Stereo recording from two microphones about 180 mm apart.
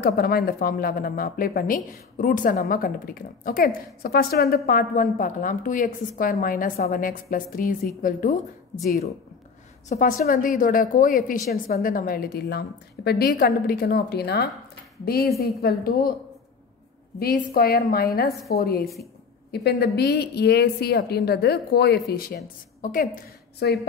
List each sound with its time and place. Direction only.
0.0 s a woman's voice: 55° left (ahead or behind)
9.8 s a woman's voice: 50° left (ahead or behind)
17.2 s a woman's voice: 60° left (ahead or behind)